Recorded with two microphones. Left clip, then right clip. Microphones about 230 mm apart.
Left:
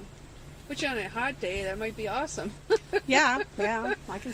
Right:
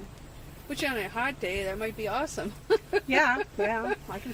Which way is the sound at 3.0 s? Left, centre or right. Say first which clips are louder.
Left 3 dB; left.